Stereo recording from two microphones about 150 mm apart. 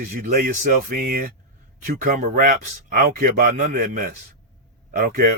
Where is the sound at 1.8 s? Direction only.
55° right (ahead or behind).